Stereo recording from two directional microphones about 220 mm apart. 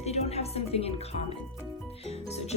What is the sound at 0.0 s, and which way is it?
A woman's voice, 30° left (ahead or behind).